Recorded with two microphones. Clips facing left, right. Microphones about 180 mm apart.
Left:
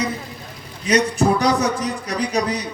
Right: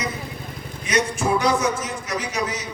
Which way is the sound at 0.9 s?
35° left (ahead or behind).